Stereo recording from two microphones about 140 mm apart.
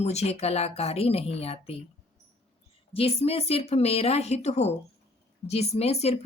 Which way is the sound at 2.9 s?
45° left (ahead or behind).